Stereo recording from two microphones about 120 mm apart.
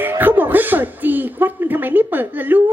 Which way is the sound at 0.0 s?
15° right (ahead or behind).